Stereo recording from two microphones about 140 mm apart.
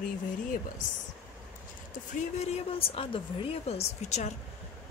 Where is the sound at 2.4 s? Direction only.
45° left (ahead or behind).